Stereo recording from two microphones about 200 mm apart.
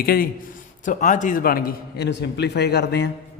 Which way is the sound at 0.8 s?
40° left (ahead or behind).